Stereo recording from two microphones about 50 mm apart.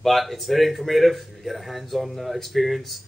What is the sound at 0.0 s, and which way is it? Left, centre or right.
Speech, centre.